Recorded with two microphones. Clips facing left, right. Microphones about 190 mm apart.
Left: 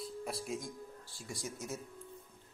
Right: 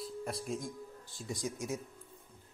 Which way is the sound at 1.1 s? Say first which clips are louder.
Right 5 dB; 20° right (ahead or behind).